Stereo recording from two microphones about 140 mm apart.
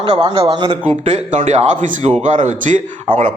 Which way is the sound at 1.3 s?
65° right (ahead or behind).